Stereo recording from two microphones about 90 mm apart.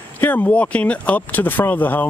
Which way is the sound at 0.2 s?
20° left (ahead or behind).